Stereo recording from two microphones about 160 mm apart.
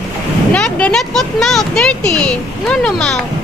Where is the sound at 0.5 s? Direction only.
5° left (ahead or behind).